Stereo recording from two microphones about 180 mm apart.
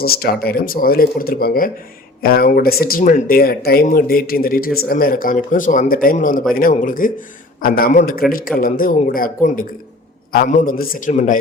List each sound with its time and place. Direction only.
0.0 s a man's voice: 55° left (ahead or behind)